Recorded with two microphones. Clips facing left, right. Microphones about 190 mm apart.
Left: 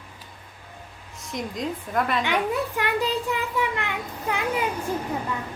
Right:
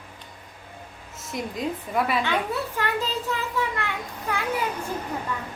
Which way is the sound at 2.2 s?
15° left (ahead or behind).